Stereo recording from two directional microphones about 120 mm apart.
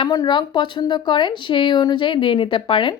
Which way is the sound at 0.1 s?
30° left (ahead or behind).